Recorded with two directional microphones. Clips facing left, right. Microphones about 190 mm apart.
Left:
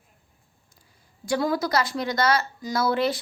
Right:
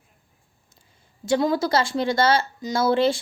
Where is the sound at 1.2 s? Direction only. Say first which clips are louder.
Right 3 dB; 25° right (ahead or behind).